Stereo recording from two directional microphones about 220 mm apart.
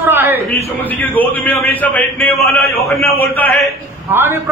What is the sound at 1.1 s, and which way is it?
A man's voice, 5° left (ahead or behind).